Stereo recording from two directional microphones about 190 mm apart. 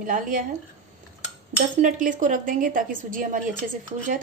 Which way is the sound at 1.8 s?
40° right (ahead or behind).